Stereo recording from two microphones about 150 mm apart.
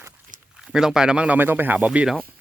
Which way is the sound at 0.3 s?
60° right (ahead or behind).